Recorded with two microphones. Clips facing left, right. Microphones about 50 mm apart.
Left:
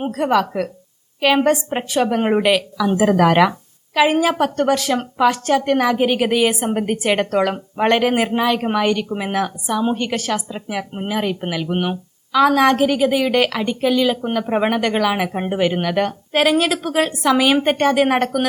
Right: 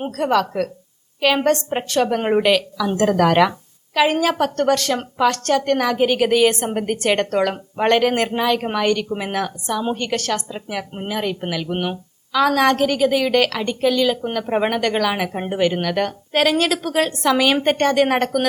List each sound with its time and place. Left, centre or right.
0.0 s a woman's voice: centre